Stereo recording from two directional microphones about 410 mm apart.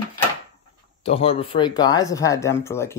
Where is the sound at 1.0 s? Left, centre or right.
Centre.